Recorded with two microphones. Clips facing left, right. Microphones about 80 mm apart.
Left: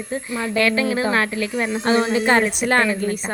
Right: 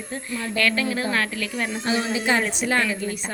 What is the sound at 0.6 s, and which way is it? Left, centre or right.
Speech, centre.